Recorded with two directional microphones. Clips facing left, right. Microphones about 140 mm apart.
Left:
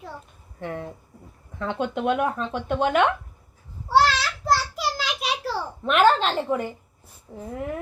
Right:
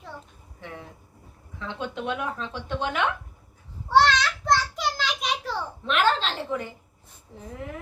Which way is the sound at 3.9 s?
5° left (ahead or behind).